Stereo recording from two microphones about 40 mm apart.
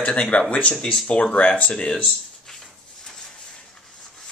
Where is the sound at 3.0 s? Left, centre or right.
Centre.